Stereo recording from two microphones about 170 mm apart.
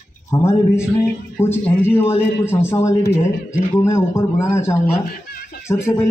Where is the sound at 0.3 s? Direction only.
15° left (ahead or behind).